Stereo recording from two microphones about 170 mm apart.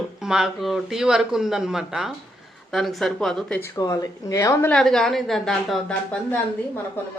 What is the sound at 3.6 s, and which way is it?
Speech, 20° left (ahead or behind).